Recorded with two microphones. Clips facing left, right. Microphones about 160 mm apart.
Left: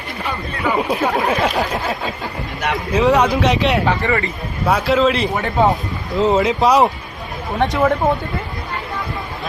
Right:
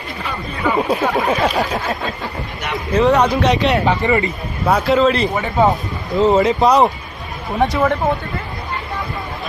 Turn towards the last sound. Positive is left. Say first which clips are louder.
# even
turn(degrees=0)  # may be behind; listen again after turning